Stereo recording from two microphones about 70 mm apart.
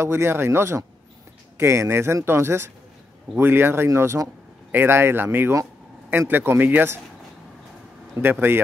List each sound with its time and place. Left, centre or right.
0.0 s speech: right
8.2 s speech: right